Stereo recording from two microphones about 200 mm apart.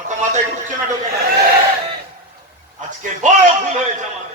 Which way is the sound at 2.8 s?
40° right (ahead or behind).